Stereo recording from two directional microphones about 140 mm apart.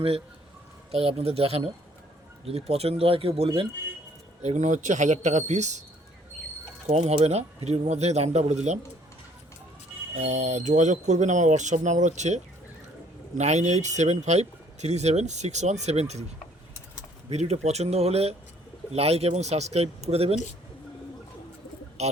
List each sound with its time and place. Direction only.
0.9 s speech: 45° right (ahead or behind)
4.4 s speech: 60° right (ahead or behind)
6.8 s speech: 50° right (ahead or behind)
10.2 s speech: 55° right (ahead or behind)
17.2 s speech: 50° right (ahead or behind)
22.0 s speech: 50° right (ahead or behind)